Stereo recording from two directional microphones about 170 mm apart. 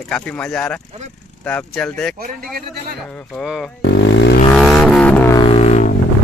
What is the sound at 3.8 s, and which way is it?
Speech, 90° left.